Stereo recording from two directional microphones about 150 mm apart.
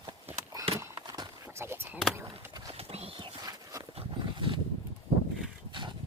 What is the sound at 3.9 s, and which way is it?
Dog, 35° right (ahead or behind).